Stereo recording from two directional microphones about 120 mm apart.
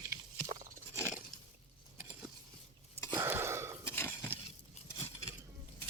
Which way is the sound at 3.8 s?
20° left (ahead or behind).